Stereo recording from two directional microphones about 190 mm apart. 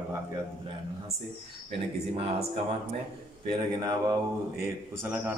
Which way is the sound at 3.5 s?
20° right (ahead or behind).